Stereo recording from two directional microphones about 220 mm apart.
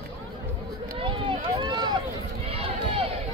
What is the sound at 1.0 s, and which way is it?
Run, 20° right (ahead or behind).